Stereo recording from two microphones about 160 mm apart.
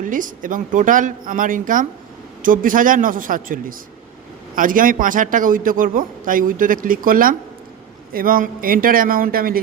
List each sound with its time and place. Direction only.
0.0 s a man's voice: 55° right (ahead or behind)